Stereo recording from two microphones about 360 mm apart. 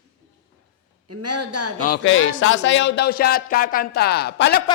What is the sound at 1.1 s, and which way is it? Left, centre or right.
Speech, right.